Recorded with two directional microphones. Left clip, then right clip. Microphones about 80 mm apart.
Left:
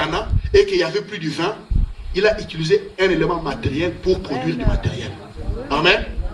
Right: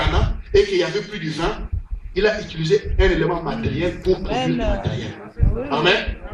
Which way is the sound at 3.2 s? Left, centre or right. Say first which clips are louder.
Left 1 dB; left.